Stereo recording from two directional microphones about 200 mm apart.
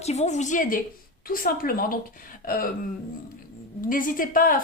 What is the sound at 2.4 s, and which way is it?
Throat clearing, 45° left (ahead or behind).